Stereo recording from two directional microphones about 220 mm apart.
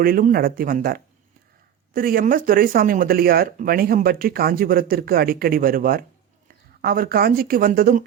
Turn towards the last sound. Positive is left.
turn(degrees=-40)  # may be behind; listen again after turning